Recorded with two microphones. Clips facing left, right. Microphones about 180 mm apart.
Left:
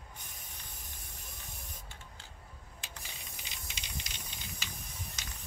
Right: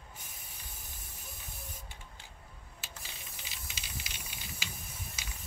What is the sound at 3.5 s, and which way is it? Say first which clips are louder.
Rattle: even; 5° right (ahead or behind).